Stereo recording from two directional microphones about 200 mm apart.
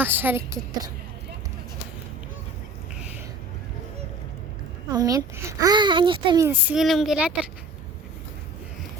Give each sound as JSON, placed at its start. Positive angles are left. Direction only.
{"t": 0.0, "sound": "a child's voice", "side_deg": -10}
{"t": 4.9, "sound": "a child's voice", "side_deg": -20}